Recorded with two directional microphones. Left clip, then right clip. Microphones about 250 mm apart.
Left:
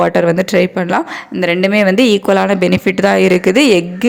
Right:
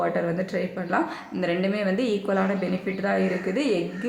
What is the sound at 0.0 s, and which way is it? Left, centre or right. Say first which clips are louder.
Speech: left 13 dB; left.